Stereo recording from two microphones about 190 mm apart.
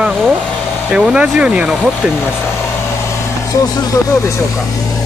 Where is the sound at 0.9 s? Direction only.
5° right (ahead or behind).